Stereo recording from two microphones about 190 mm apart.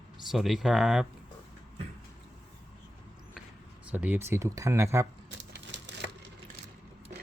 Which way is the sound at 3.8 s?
10° right (ahead or behind).